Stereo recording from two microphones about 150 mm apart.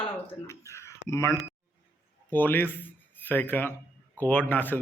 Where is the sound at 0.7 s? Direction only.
20° left (ahead or behind).